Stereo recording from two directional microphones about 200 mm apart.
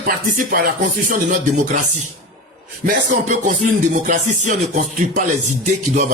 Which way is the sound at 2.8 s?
40° right (ahead or behind).